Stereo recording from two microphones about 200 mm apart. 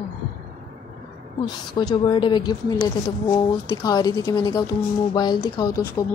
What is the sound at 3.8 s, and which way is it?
A woman's voice, 20° left (ahead or behind).